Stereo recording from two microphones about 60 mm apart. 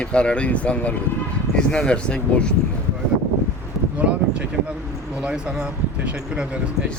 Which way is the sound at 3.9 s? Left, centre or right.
Right.